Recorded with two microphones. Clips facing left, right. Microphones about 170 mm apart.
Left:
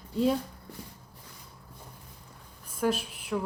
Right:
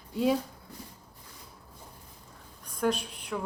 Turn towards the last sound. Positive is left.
turn(degrees=5)  # may be behind; listen again after turning